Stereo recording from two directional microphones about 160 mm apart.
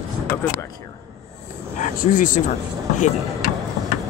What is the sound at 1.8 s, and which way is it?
Speech, 55° left (ahead or behind).